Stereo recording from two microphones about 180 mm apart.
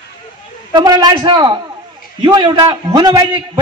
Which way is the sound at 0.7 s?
25° right (ahead or behind).